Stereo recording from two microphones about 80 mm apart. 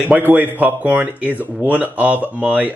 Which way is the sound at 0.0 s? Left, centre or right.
Right.